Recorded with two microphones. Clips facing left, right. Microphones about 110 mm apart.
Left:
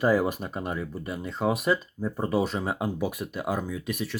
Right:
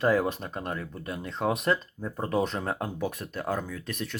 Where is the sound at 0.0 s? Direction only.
10° left (ahead or behind).